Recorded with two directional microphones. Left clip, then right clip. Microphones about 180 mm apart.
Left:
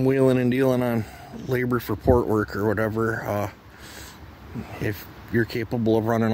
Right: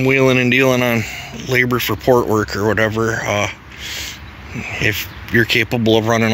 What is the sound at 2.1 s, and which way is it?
Speech, 20° left (ahead or behind).